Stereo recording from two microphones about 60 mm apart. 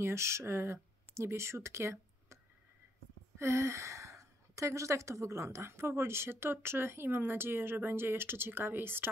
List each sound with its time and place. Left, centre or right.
0.0 s speech: right
3.3 s a woman's voice: right